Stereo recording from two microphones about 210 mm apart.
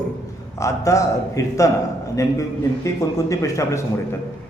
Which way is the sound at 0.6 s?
15° left (ahead or behind).